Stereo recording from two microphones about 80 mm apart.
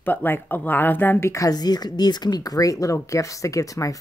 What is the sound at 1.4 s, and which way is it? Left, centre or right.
Speech, left.